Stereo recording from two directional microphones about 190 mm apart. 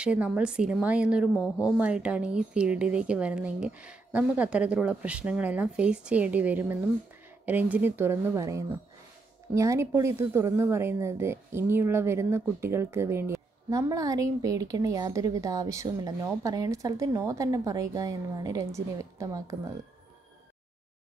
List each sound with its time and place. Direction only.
0.0 s a woman's voice: 5° right (ahead or behind)